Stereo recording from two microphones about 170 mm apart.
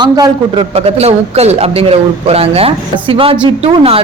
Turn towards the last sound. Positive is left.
turn(degrees=-35)  # may be behind; listen again after turning